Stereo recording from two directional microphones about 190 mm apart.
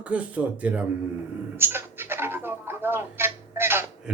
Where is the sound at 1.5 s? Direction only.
10° right (ahead or behind).